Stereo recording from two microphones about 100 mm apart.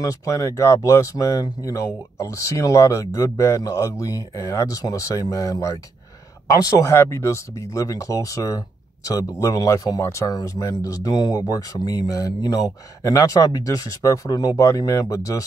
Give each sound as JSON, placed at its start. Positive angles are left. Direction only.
{"t": 0.0, "sound": "speech", "side_deg": 35}